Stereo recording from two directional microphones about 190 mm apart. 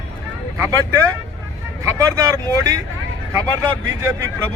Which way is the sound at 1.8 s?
15° right (ahead or behind).